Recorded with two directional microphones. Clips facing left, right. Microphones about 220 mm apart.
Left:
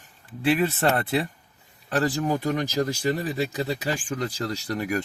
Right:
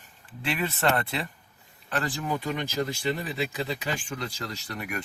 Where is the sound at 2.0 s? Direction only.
40° left (ahead or behind).